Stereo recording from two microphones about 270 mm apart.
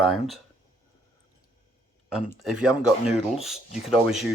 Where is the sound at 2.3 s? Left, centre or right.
Centre.